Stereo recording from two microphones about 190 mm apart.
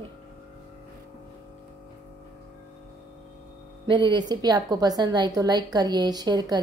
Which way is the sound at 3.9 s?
25° right (ahead or behind).